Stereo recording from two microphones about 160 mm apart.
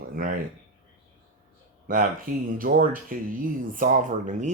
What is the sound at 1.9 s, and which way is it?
Speech, 60° right (ahead or behind).